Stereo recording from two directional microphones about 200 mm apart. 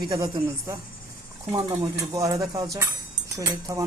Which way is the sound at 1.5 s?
20° right (ahead or behind).